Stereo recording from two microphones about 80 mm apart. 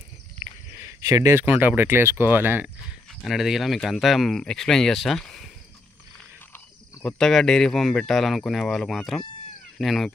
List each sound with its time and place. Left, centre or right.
0.7 s a sound: right
1.0 s speech: right
1.3 s speech: right
3.3 s speech: centre
7.0 s speech: centre